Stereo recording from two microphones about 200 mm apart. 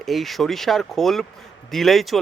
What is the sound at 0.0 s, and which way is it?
Speech, centre (ahead or behind).